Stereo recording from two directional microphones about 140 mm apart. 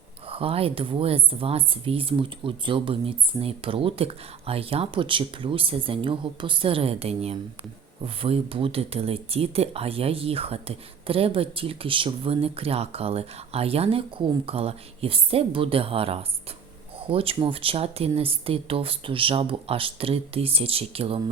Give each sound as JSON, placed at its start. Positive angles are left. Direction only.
{"t": 0.3, "sound": "speech", "side_deg": -45}